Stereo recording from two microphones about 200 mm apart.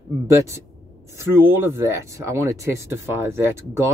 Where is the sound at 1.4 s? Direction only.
15° right (ahead or behind).